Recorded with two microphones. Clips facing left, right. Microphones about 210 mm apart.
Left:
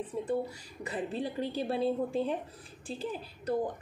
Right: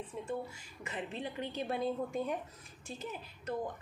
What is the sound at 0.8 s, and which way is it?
Speech, 35° left (ahead or behind).